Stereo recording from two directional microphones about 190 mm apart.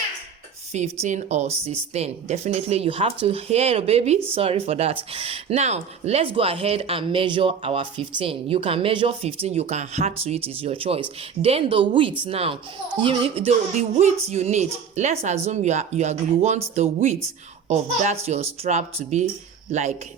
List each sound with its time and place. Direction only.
1.0 s a woman's voice: 40° right (ahead or behind)